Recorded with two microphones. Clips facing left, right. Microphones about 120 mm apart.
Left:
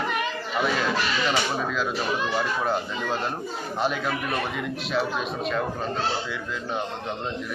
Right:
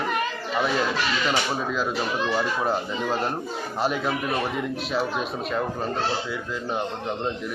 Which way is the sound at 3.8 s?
5° right (ahead or behind).